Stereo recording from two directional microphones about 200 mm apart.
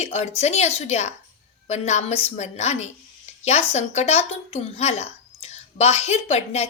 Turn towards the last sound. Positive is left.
turn(degrees=35)  # may be behind; listen again after turning